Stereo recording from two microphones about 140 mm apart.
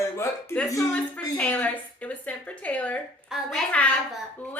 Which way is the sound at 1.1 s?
10° left (ahead or behind).